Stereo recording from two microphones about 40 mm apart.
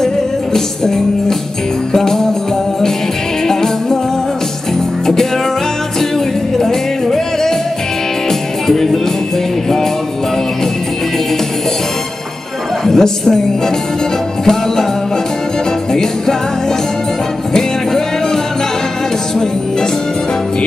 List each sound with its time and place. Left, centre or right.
0.0 s music: centre
3.4 s music: centre
5.9 s music: centre
12.8 s music: centre
14.4 s music: centre
15.9 s music: centre
17.5 s music: centre